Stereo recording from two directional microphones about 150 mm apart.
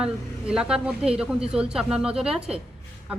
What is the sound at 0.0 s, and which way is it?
A woman's voice, 5° right (ahead or behind).